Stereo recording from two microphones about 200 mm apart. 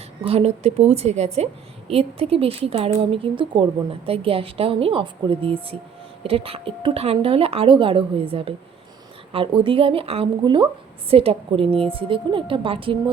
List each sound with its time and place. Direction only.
0.2 s a woman's voice: 30° right (ahead or behind)